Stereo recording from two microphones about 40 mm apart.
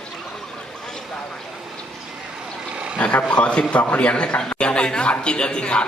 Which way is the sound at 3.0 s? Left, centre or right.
Left.